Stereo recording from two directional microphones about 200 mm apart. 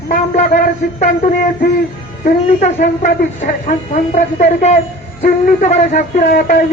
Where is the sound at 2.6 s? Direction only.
35° left (ahead or behind).